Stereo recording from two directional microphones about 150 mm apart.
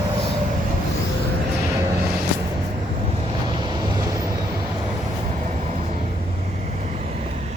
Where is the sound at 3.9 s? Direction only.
20° right (ahead or behind).